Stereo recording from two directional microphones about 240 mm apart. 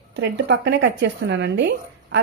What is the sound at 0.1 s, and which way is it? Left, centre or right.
A woman's voice, right.